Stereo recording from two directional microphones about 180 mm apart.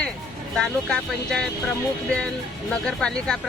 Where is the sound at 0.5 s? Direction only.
5° left (ahead or behind).